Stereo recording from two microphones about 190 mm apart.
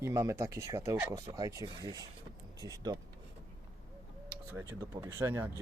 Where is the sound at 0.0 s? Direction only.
15° right (ahead or behind).